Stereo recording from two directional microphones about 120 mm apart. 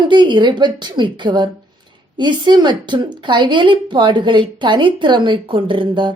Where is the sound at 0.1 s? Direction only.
40° right (ahead or behind).